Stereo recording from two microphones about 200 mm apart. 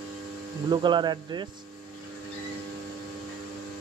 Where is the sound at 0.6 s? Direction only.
20° right (ahead or behind).